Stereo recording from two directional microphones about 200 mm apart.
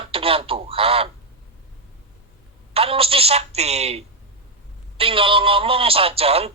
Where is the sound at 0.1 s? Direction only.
25° right (ahead or behind).